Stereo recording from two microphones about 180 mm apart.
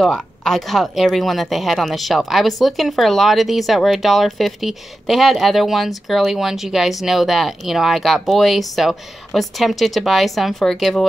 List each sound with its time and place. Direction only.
0.0 s speech: centre (ahead or behind)